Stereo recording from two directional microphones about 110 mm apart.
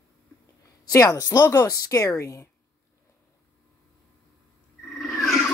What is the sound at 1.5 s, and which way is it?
Speech, 25° left (ahead or behind).